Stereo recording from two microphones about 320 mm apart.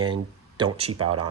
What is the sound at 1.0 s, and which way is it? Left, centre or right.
Speech, right.